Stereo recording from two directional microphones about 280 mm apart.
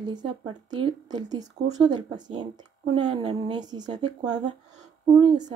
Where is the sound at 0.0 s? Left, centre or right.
Centre.